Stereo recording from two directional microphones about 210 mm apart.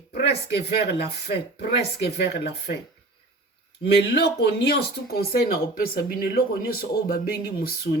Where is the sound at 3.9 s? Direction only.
50° left (ahead or behind).